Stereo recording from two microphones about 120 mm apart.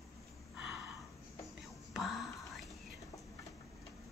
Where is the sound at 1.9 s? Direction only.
Centre (ahead or behind).